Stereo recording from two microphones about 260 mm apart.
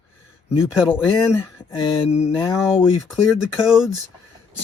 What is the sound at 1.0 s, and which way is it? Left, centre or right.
Speech, centre.